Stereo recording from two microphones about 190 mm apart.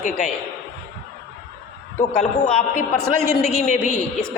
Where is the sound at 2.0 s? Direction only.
40° left (ahead or behind).